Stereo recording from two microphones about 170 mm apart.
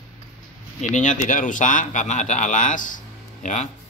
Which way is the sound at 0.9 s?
45° left (ahead or behind).